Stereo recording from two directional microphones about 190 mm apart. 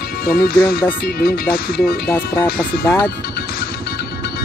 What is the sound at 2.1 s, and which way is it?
Speech, 20° left (ahead or behind).